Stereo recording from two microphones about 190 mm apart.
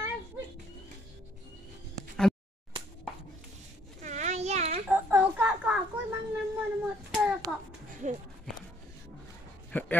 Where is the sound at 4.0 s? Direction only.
35° right (ahead or behind).